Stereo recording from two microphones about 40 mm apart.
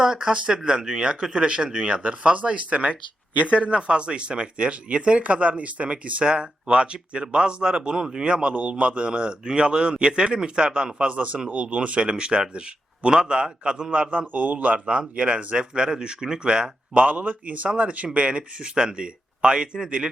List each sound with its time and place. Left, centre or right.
0.0 s speech: centre
11.1 s a man's voice: right
13.9 s a man's voice: right
14.8 s speech: right
16.9 s a man's voice: right